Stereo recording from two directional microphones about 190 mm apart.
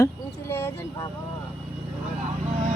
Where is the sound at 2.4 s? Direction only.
35° right (ahead or behind).